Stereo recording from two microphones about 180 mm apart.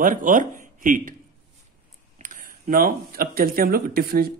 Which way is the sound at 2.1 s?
45° right (ahead or behind).